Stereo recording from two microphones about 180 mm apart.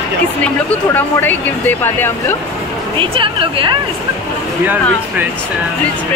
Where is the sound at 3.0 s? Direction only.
30° right (ahead or behind).